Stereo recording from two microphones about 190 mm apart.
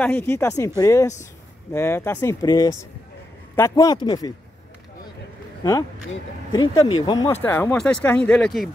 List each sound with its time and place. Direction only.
0.0 s speech: 10° left (ahead or behind)
5.6 s speech: 20° left (ahead or behind)